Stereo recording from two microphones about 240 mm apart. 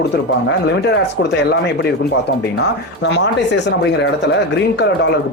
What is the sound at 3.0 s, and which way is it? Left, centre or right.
Speech, left.